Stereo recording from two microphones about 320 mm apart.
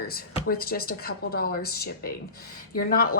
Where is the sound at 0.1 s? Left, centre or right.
Left.